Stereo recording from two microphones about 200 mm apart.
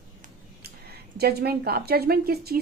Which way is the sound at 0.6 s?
55° right (ahead or behind).